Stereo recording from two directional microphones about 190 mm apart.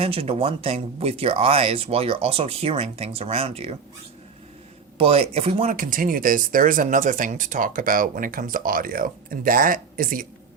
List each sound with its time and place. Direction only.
0.0 s speech: 30° right (ahead or behind)
4.9 s speech: 30° right (ahead or behind)
5.6 s speech: 45° right (ahead or behind)